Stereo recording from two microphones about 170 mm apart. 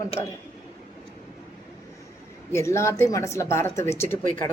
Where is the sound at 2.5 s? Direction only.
15° left (ahead or behind).